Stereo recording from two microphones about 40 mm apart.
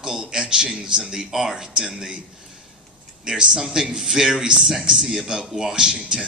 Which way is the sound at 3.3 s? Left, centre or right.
Centre.